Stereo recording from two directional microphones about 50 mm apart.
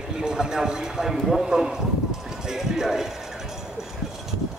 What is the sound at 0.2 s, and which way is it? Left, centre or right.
Speech, centre.